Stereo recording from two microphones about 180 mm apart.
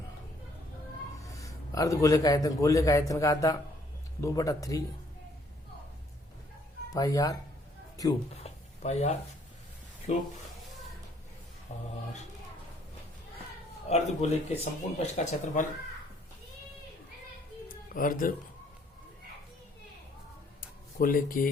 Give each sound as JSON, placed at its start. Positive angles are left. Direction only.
{"t": 1.2, "sound": "a man's voice", "side_deg": 20}
{"t": 6.9, "sound": "speech", "side_deg": 20}
{"t": 8.4, "sound": "a sound", "side_deg": 35}
{"t": 10.1, "sound": "speech", "side_deg": 45}
{"t": 11.7, "sound": "speech", "side_deg": 40}
{"t": 13.9, "sound": "speech", "side_deg": 35}
{"t": 17.9, "sound": "speech", "side_deg": 50}
{"t": 20.6, "sound": "a sound", "side_deg": 50}